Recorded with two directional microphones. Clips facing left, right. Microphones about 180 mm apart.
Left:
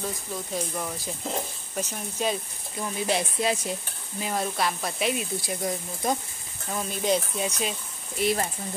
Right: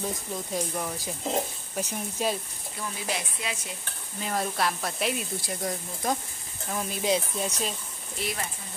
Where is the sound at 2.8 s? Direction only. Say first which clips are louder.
Left 6 dB; 30° left (ahead or behind).